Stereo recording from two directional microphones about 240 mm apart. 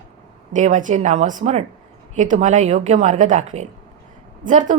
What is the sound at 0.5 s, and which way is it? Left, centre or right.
A woman's voice, right.